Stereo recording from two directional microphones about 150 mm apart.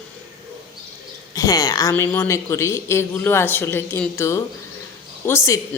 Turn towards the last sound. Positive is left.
turn(degrees=20)  # may be behind; listen again after turning